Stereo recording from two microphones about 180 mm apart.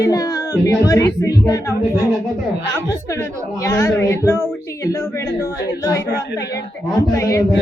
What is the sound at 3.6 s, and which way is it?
Speech, 15° left (ahead or behind).